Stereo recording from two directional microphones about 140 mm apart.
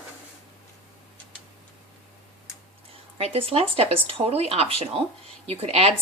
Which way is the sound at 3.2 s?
45° right (ahead or behind).